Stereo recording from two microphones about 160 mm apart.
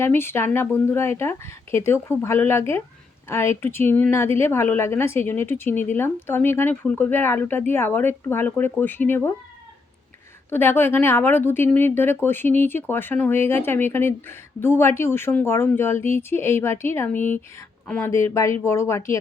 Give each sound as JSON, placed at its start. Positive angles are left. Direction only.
{"t": 0.0, "sound": "a woman's voice", "side_deg": 15}
{"t": 10.5, "sound": "a woman's voice", "side_deg": 15}